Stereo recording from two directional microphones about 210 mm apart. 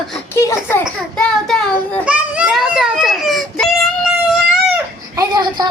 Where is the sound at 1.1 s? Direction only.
5° left (ahead or behind).